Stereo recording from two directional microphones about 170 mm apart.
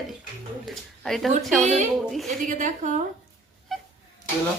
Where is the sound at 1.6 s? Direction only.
45° right (ahead or behind).